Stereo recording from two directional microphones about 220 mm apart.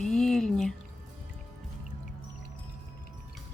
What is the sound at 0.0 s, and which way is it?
Music, centre (ahead or behind).